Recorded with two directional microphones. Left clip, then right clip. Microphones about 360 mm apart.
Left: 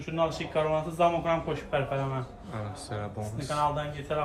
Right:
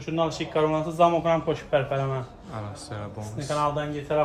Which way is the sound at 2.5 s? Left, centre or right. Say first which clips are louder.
Right 1 dB; centre.